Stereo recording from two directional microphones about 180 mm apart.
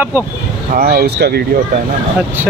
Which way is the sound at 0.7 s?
60° right (ahead or behind).